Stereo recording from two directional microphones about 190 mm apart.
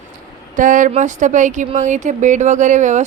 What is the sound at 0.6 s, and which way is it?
A woman's voice, 45° right (ahead or behind).